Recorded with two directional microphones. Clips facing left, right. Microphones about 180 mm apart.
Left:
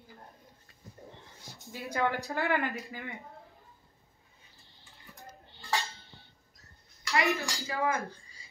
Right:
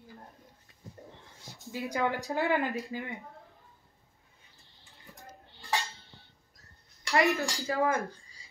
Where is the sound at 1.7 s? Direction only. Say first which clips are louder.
Right 1 dB; 15° right (ahead or behind).